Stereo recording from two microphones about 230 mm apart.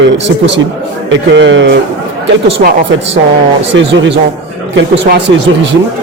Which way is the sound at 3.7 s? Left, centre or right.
Right.